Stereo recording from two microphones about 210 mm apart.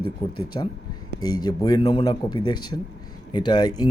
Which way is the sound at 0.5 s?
20° left (ahead or behind).